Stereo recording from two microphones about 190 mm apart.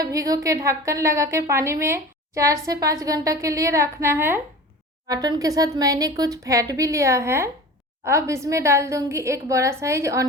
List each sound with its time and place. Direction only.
0.0 s a woman's voice: 20° right (ahead or behind)